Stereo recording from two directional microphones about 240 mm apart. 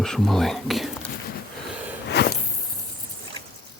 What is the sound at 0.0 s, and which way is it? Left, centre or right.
Speech, centre.